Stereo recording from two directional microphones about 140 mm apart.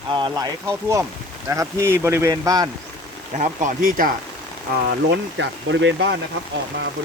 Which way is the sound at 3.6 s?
80° right.